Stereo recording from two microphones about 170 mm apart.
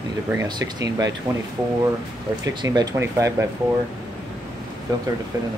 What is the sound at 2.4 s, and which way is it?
Speech, 20° right (ahead or behind).